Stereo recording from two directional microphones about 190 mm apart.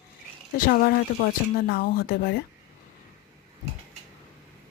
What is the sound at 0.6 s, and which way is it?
Speech, 50° left (ahead or behind).